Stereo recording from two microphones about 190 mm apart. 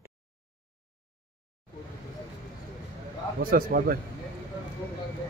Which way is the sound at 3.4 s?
50° right (ahead or behind).